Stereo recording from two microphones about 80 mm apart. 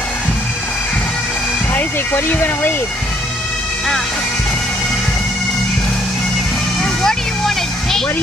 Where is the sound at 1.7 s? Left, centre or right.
Left.